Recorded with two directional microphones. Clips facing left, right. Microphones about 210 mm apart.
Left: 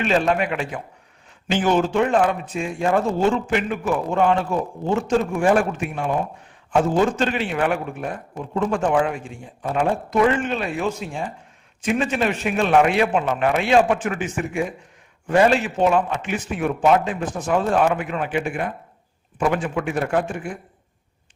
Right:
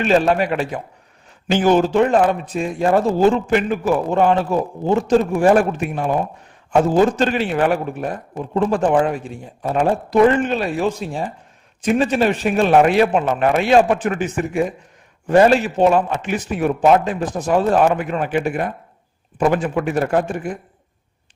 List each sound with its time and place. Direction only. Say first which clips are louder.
0.0 s speech: right 4 dB; 40° right (ahead or behind)